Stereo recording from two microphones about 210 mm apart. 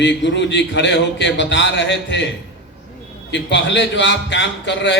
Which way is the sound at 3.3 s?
60° left (ahead or behind).